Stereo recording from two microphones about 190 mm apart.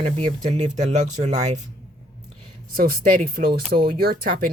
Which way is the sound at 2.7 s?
50° right (ahead or behind).